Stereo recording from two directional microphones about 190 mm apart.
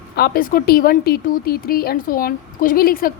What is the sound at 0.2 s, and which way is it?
A woman's voice, 50° left (ahead or behind).